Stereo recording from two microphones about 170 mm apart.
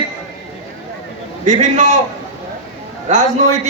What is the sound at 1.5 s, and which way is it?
Speech, 45° right (ahead or behind).